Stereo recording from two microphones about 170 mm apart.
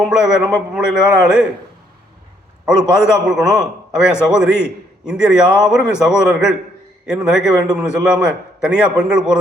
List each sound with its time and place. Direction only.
0.1 s a man's voice: 5° right (ahead or behind)
2.6 s a man's voice: 5° right (ahead or behind)